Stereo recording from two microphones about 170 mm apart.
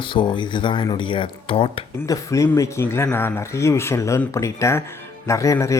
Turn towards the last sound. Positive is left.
turn(degrees=15)  # may be behind; listen again after turning